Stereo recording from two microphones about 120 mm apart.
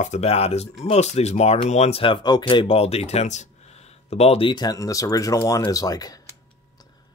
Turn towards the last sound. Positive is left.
turn(degrees=30)  # may be behind; listen again after turning